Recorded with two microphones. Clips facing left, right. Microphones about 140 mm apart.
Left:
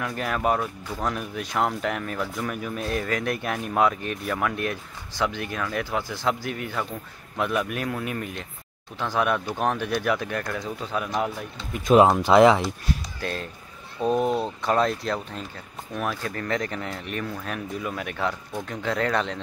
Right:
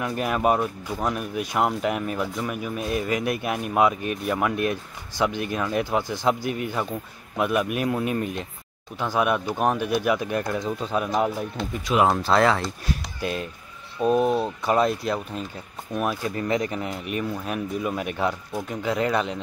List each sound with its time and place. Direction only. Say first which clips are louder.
0.0 s speech: right 3 dB; 15° right (ahead or behind)
8.9 s speech: right 1 dB; 10° right (ahead or behind)
12.1 s speech: left 4 dB; 15° left (ahead or behind)
13.2 s speech: right 3 dB; 15° right (ahead or behind)